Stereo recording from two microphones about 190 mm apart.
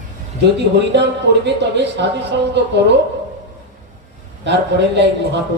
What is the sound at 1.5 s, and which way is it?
Speech, 65° right (ahead or behind).